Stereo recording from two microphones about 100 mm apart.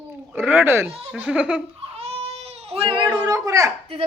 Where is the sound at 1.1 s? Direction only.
10° right (ahead or behind).